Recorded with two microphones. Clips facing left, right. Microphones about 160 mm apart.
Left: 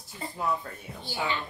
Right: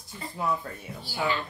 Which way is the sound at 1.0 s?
20° left (ahead or behind).